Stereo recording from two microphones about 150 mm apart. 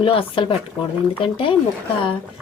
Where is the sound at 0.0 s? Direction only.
35° left (ahead or behind).